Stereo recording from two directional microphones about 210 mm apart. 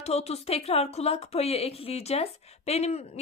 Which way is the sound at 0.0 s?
30° left (ahead or behind).